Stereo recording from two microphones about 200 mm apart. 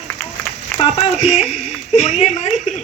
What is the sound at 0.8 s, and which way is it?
Speech, 30° left (ahead or behind).